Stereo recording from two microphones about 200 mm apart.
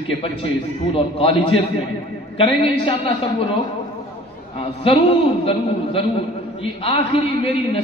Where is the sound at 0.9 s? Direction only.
30° left (ahead or behind).